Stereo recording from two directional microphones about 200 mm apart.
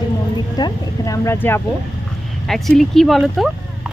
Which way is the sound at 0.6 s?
20° left (ahead or behind).